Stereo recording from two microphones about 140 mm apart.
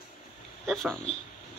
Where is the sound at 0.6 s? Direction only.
Centre (ahead or behind).